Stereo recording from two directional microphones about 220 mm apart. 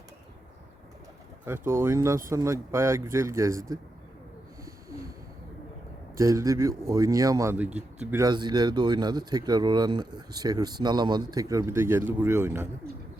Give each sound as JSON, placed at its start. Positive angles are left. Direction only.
{"t": 1.5, "sound": "speech", "side_deg": -10}
{"t": 6.1, "sound": "speech", "side_deg": -15}
{"t": 7.7, "sound": "speech", "side_deg": -30}
{"t": 8.0, "sound": "speech", "side_deg": -15}